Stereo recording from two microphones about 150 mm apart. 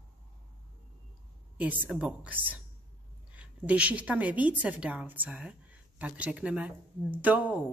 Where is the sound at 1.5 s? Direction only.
10° right (ahead or behind).